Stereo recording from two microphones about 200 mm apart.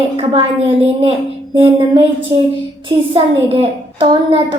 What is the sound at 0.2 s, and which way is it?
A woman's voice, 25° right (ahead or behind).